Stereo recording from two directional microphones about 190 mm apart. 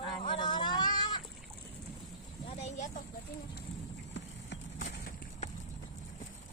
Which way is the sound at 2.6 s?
40° left (ahead or behind).